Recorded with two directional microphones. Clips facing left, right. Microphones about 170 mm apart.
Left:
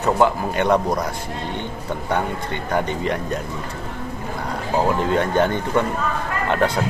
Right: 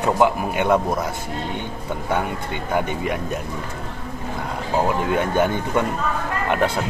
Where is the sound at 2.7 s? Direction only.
5° right (ahead or behind).